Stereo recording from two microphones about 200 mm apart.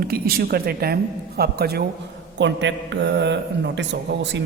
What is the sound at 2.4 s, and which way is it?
Speech, 65° right (ahead or behind).